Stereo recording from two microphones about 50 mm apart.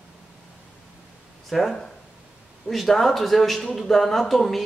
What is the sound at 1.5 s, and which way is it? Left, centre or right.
A woman's voice, centre.